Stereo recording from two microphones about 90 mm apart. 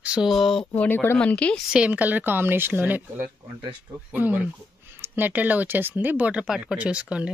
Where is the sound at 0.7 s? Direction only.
20° left (ahead or behind).